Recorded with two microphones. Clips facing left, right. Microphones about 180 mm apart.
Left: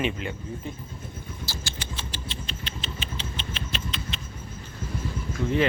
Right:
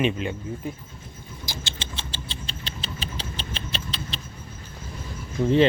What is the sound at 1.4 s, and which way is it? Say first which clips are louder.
Rodents: right 2 dB; 20° right (ahead or behind).